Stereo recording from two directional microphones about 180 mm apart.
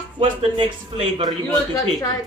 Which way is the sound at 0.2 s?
30° right (ahead or behind).